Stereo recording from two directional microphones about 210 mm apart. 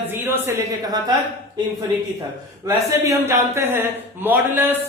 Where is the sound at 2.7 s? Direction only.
15° right (ahead or behind).